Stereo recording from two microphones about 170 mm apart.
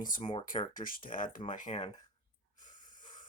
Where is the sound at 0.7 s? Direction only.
55° left (ahead or behind).